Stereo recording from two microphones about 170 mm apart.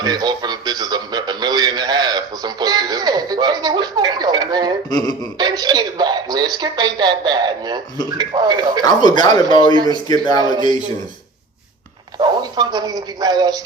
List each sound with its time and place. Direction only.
0.0 s radio: 25° right (ahead or behind)
4.9 s speech: 25° left (ahead or behind)
5.4 s a man's voice: 25° right (ahead or behind)
8.8 s speech: 25° left (ahead or behind)
9.7 s speech: 25° right (ahead or behind)
10.1 s speech: 25° left (ahead or behind)
12.2 s speech: 25° right (ahead or behind)